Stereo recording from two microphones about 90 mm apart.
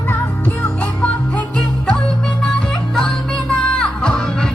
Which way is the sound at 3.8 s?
10° left (ahead or behind).